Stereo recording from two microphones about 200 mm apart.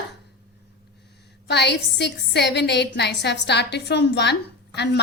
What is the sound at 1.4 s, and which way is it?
A woman's voice, 60° left (ahead or behind).